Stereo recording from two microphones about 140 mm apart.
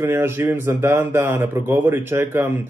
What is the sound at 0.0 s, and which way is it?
A man's voice, 15° right (ahead or behind).